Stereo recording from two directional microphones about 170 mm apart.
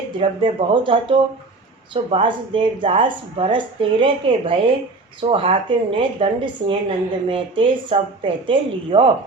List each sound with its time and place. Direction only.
0.2 s a woman's voice: 30° right (ahead or behind)